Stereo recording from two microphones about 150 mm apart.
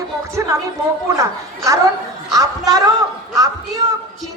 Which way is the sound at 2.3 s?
25° right (ahead or behind).